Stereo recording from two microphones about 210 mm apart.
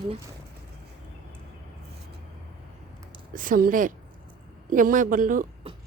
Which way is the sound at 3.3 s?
40° right (ahead or behind).